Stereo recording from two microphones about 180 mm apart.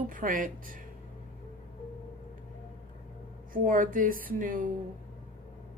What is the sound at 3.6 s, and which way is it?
Speech, 50° right (ahead or behind).